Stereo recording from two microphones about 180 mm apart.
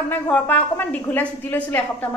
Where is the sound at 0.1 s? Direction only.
10° left (ahead or behind).